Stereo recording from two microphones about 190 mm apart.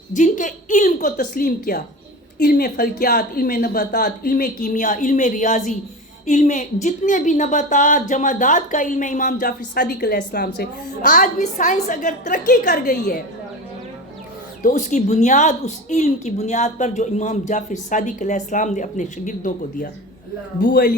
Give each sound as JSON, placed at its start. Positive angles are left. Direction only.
{"t": 0.1, "sound": "a woman's voice", "side_deg": 40}
{"t": 14.6, "sound": "a woman's voice", "side_deg": 40}
{"t": 20.6, "sound": "a man's voice", "side_deg": 55}